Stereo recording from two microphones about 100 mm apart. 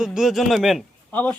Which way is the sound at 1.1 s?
15° left (ahead or behind).